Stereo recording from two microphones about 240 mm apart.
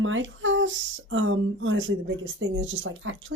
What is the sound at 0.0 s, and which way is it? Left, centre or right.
A woman's voice, right.